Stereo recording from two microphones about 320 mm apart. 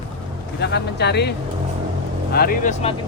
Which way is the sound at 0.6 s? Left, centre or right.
Left.